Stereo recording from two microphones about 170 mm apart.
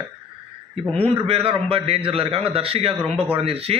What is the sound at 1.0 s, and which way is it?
A man's voice, 35° right (ahead or behind).